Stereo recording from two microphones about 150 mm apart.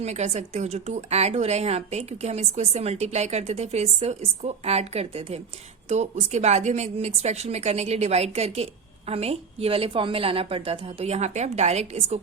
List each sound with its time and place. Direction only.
0.0 s a woman's voice: 50° right (ahead or behind)